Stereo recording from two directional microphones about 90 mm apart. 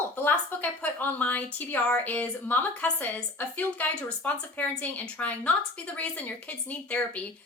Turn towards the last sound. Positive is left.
turn(degrees=15)  # may be behind; listen again after turning